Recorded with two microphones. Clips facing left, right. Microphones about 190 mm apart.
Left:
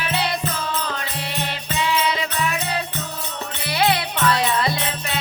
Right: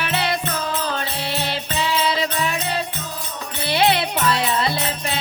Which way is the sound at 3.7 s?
25° right (ahead or behind).